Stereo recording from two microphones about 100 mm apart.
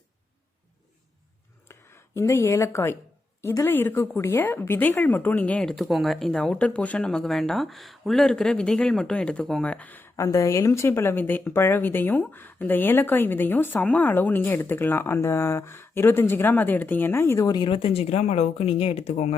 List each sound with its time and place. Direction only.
2.1 s a woman's voice: 30° left (ahead or behind); by 5.7 s 15° left (ahead or behind)
5.7 s speech: centre (ahead or behind); by 10.1 s 15° left (ahead or behind)
10.2 s a woman's voice: 30° left (ahead or behind)
17.3 s speech: 35° left (ahead or behind)
17.6 s speech: 65° left (ahead or behind)